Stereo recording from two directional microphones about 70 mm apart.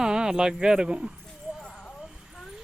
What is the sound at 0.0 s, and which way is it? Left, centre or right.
Speech, centre.